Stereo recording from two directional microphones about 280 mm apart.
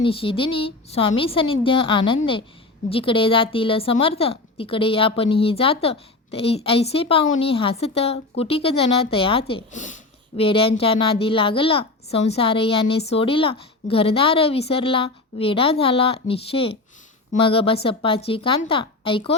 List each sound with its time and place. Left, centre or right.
0.0 s a woman's voice: centre